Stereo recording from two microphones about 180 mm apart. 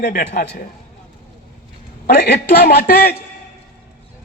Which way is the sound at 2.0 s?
60° left (ahead or behind).